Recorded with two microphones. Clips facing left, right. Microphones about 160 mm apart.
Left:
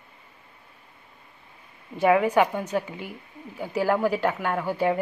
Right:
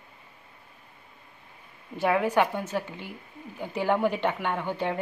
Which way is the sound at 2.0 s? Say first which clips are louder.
Left 4 dB; centre (ahead or behind).